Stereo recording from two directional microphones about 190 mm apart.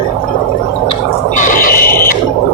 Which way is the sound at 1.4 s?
45° left (ahead or behind).